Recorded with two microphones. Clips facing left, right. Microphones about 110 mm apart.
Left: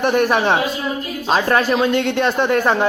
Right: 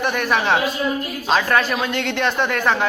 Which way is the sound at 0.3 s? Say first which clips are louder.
Left 2 dB; 25° left (ahead or behind).